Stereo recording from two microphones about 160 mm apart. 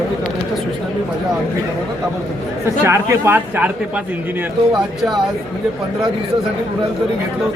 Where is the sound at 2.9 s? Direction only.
15° right (ahead or behind).